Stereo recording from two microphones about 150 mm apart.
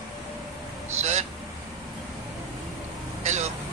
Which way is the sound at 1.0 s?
50° right (ahead or behind).